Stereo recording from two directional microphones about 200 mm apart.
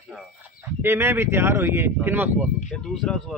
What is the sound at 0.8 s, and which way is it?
Speech, 10° right (ahead or behind).